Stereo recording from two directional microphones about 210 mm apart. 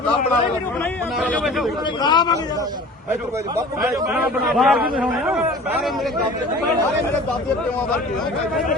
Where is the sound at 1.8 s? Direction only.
20° left (ahead or behind).